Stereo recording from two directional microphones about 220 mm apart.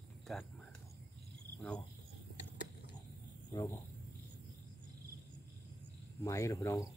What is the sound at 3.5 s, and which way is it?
Speech, 15° left (ahead or behind).